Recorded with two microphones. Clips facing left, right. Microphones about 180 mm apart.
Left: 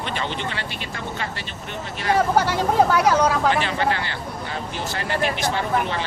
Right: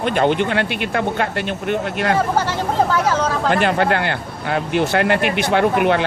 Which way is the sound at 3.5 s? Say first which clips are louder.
Right 5 dB; 55° right (ahead or behind).